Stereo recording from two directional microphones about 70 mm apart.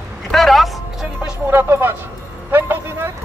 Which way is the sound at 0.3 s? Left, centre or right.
Centre.